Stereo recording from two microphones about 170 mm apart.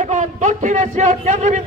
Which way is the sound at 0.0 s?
45° right (ahead or behind).